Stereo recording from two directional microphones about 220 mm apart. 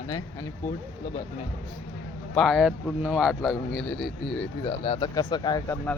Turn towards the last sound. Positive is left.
turn(degrees=15)  # may be behind; listen again after turning